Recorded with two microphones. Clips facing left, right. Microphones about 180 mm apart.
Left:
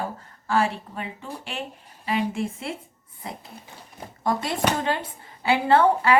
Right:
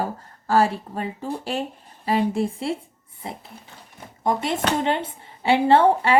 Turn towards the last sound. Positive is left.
turn(degrees=-25)  # may be behind; listen again after turning